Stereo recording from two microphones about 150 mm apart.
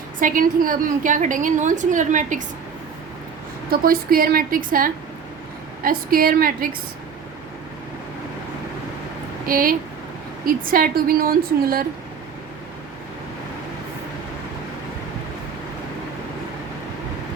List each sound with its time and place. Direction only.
0.2 s a woman's voice: 65° right (ahead or behind)
3.7 s a woman's voice: 80° right
9.5 s a woman's voice: 70° right (ahead or behind)